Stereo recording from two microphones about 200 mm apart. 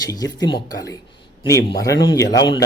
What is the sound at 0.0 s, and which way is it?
Speech, 20° left (ahead or behind).